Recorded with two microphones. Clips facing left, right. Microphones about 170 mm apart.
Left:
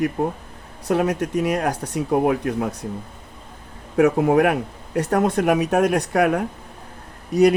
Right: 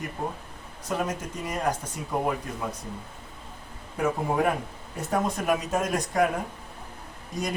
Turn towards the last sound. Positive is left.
turn(degrees=70)  # may be behind; listen again after turning